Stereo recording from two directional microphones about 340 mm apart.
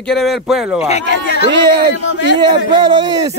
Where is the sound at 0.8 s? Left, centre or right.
Left.